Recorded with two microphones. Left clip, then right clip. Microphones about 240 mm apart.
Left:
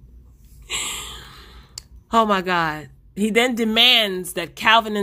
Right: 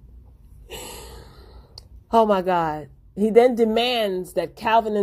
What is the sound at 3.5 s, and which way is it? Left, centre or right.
Speech, left.